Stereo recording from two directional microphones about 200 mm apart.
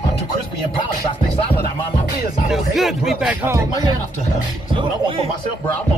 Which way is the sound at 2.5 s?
Centre (ahead or behind).